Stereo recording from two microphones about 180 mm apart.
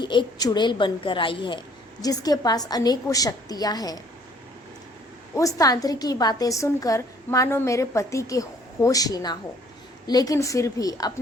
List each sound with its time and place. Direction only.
0.0 s a woman's voice: 25° left (ahead or behind)
5.3 s a woman's voice: 20° left (ahead or behind)